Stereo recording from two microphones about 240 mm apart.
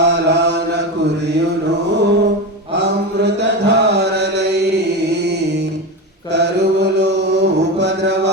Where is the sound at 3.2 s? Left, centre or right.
Right.